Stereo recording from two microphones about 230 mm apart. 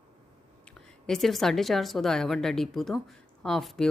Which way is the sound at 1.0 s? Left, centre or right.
Centre.